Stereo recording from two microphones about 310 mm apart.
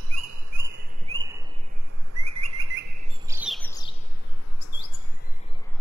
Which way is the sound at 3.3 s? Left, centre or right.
Centre.